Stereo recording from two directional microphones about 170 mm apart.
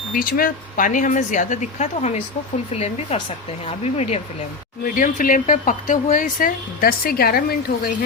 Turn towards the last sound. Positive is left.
turn(degrees=60)  # may be behind; listen again after turning